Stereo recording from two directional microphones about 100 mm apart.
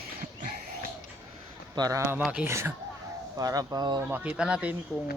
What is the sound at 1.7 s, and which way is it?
Speech, 40° right (ahead or behind).